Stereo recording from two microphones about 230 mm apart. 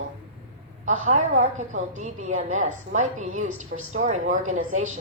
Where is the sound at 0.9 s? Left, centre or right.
Right.